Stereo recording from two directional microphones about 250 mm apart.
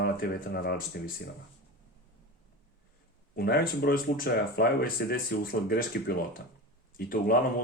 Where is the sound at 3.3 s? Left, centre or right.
Left.